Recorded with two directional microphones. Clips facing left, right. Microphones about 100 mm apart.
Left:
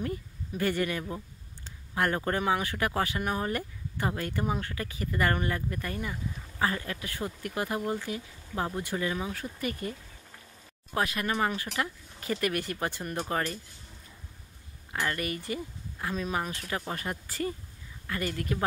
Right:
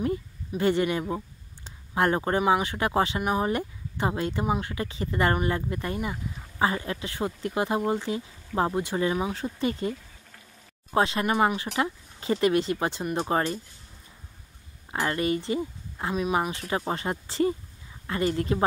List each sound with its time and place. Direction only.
0.6 s speech: 20° right (ahead or behind)
14.9 s speech: 25° right (ahead or behind)